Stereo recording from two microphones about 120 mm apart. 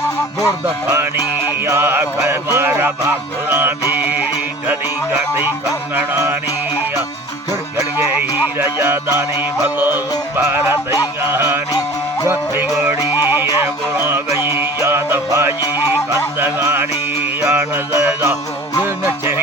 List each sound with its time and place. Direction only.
1.5 s music: 20° right (ahead or behind)
7.9 s music: 15° right (ahead or behind)
12.8 s music: 20° right (ahead or behind)